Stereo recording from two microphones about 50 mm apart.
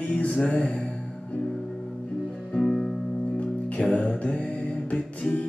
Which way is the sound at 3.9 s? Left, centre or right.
Left.